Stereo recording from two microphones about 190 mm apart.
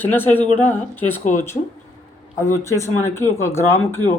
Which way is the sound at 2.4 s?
15° left (ahead or behind).